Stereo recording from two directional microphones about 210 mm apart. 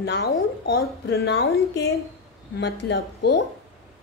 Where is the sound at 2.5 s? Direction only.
55° left (ahead or behind).